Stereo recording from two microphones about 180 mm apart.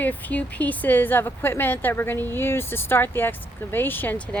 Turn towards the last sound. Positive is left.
turn(degrees=10)  # may be behind; listen again after turning